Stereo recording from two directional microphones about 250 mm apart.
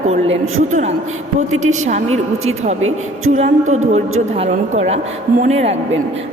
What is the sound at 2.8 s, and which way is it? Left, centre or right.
Speech, right.